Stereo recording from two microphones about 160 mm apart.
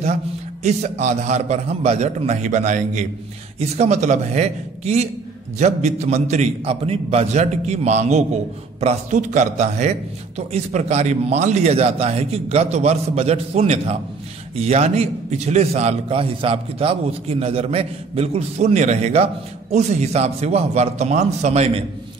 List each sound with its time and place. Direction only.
0.7 s a man's voice: 45° right (ahead or behind)